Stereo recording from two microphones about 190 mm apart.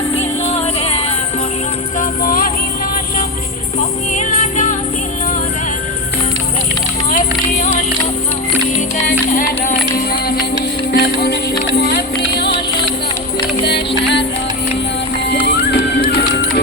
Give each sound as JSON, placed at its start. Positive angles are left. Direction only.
{"t": 2.0, "sound": "music", "side_deg": 45}
{"t": 3.8, "sound": "music", "side_deg": 40}
{"t": 9.0, "sound": "music", "side_deg": 45}
{"t": 10.9, "sound": "music", "side_deg": 60}
{"t": 15.3, "sound": "music", "side_deg": 60}